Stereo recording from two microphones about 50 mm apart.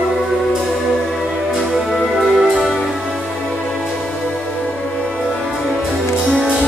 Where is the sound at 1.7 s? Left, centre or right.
Centre.